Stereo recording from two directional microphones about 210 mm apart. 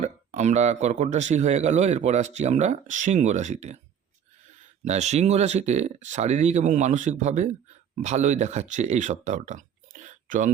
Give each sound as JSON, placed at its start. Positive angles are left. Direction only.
{"t": 0.0, "sound": "speech", "side_deg": -35}
{"t": 4.9, "sound": "speech", "side_deg": -35}